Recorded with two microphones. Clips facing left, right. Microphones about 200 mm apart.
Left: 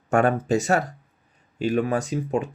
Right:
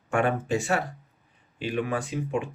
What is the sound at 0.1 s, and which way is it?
Speech, 40° left (ahead or behind).